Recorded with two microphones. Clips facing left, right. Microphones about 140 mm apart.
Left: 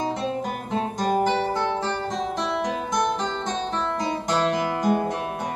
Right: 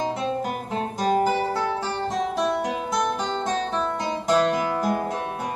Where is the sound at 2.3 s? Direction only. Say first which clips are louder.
Right 2 dB; 5° right (ahead or behind).